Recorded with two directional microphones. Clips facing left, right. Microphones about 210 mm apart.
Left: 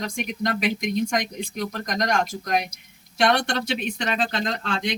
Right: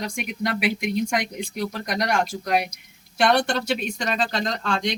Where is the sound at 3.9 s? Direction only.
40° right (ahead or behind).